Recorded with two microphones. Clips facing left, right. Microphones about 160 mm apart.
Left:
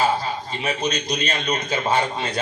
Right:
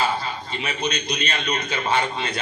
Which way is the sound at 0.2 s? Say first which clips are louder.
Left 2 dB; 40° left (ahead or behind).